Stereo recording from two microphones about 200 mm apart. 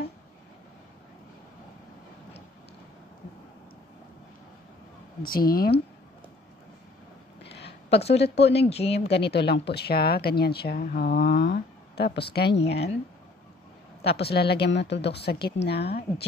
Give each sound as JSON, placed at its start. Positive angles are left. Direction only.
{"t": 5.2, "sound": "speech", "side_deg": 45}
{"t": 7.5, "sound": "a sound", "side_deg": 60}
{"t": 8.0, "sound": "speech", "side_deg": 30}
{"t": 9.0, "sound": "speech", "side_deg": 55}
{"t": 14.0, "sound": "speech", "side_deg": 55}